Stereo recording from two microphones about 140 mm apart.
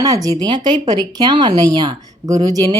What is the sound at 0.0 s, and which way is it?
Speech, 25° right (ahead or behind).